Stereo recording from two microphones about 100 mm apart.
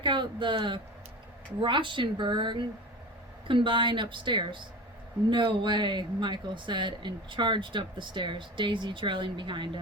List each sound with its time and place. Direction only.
0.0 s a woman's voice: 55° right (ahead or behind)